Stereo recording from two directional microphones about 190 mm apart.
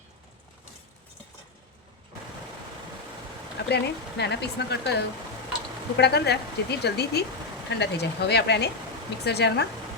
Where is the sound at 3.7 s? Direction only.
60° left (ahead or behind).